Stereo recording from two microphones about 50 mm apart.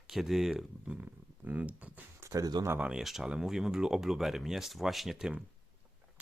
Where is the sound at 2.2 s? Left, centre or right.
Right.